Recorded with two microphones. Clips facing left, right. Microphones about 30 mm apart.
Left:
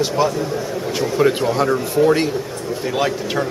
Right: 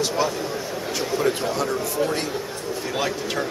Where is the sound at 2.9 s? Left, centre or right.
Centre.